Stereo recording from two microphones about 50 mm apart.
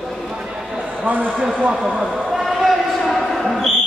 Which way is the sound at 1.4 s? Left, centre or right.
Right.